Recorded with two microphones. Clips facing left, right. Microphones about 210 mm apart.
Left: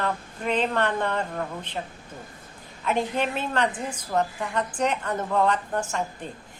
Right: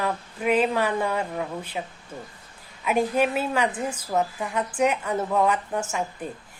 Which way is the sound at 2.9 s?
10° right (ahead or behind).